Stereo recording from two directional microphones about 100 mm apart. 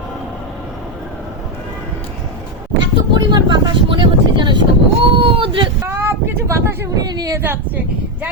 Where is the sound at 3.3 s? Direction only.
55° right (ahead or behind).